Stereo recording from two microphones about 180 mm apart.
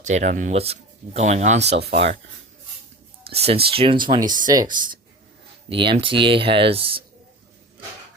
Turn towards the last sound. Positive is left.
turn(degrees=-30)  # may be behind; listen again after turning